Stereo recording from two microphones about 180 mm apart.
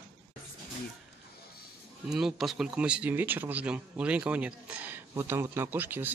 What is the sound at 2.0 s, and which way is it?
Speech, 5° right (ahead or behind).